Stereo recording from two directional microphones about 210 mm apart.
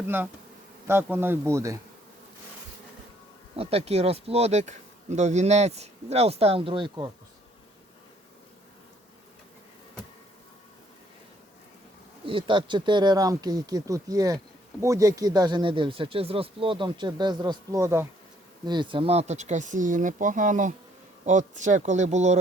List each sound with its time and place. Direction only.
0.9 s speech: 10° right (ahead or behind)
3.5 s speech: 30° right (ahead or behind)
12.2 s speech: 25° right (ahead or behind)